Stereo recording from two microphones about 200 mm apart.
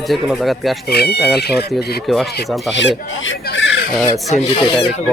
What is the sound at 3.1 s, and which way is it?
Chicken, 75° left (ahead or behind).